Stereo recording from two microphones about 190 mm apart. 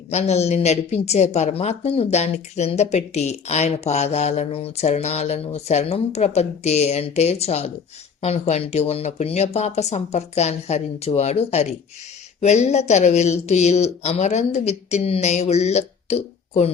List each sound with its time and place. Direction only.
0.1 s a woman's voice: 35° left (ahead or behind)